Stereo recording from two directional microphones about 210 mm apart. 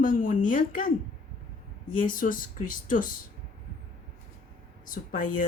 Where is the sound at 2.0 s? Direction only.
40° left (ahead or behind).